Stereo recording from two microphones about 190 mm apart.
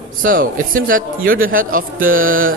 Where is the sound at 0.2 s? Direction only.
45° right (ahead or behind).